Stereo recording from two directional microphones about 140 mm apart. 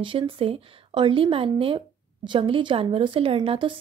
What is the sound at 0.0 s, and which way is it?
A woman's voice, 40° right (ahead or behind).